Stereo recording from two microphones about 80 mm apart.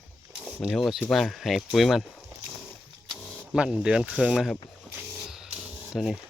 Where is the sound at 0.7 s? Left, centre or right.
Centre.